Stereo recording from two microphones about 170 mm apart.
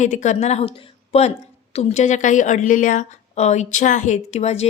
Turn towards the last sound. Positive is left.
turn(degrees=40)  # may be behind; listen again after turning